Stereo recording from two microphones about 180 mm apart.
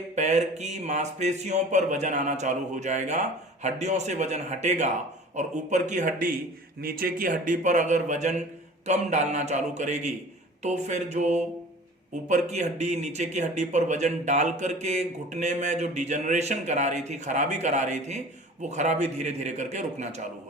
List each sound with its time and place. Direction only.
0.2 s a man's voice: 40° right (ahead or behind)
12.5 s speech: 40° right (ahead or behind)